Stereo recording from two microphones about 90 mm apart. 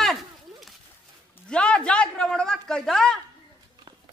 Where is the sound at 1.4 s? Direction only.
10° left (ahead or behind).